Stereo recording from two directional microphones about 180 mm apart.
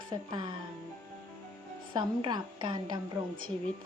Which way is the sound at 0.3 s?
25° right (ahead or behind).